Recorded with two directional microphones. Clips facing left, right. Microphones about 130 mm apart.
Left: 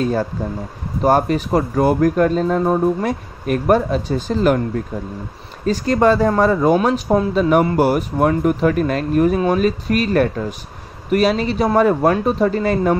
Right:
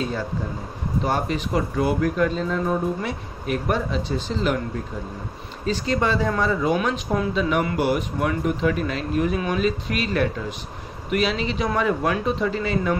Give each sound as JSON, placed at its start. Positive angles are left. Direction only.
{"t": 0.0, "sound": "speech", "side_deg": 45}
{"t": 5.7, "sound": "speech", "side_deg": 45}